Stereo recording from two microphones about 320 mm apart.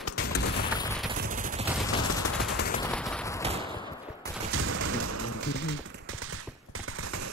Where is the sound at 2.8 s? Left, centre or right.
Centre.